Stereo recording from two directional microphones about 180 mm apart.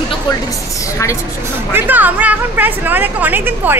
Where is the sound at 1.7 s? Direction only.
10° right (ahead or behind).